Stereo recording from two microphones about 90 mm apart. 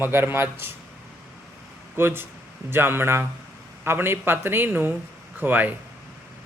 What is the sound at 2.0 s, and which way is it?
A man's voice, 25° right (ahead or behind).